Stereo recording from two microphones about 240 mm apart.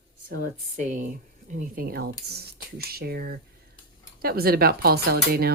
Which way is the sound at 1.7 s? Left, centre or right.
Right.